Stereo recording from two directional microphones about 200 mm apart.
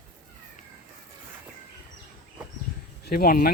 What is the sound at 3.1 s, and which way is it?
Speech, 50° left (ahead or behind).